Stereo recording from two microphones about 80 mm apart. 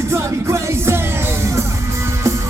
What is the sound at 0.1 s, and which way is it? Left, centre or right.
Music, right.